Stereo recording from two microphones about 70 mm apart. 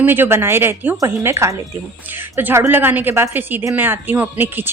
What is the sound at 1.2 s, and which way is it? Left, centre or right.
Speech, right.